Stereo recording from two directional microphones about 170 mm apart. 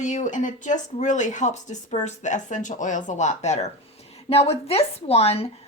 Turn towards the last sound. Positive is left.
turn(degrees=35)  # may be behind; listen again after turning